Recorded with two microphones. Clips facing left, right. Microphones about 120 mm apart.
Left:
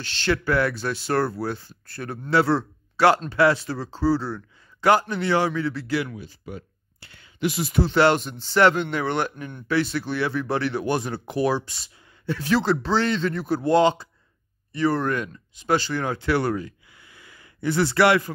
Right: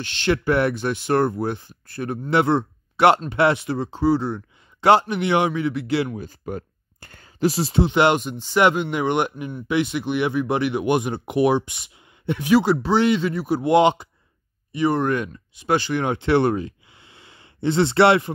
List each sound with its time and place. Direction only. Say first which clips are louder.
0.0 s speech: right 3 dB; 20° right (ahead or behind)
6.1 s a sound: right 6 dB; 45° right (ahead or behind)
7.8 s speech: right 1 dB; 15° right (ahead or behind)